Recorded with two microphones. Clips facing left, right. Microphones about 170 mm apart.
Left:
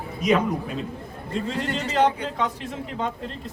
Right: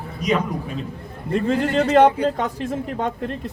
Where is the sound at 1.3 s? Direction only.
60° right (ahead or behind).